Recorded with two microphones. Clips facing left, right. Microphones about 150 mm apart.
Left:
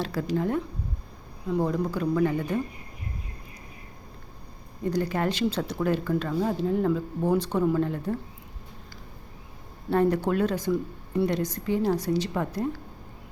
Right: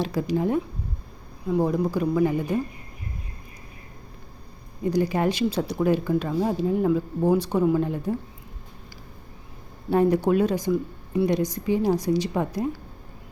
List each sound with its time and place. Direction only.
0.0 s speech: 15° right (ahead or behind)
4.8 s speech: 10° right (ahead or behind)
9.9 s speech: 15° right (ahead or behind)